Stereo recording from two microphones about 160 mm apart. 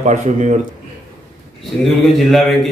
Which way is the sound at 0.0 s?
50° right (ahead or behind).